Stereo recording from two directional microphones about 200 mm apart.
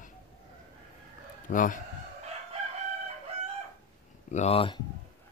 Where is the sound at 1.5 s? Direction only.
40° left (ahead or behind).